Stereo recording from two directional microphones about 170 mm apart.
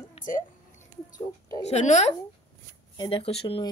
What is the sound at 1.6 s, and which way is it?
Speech, 40° left (ahead or behind).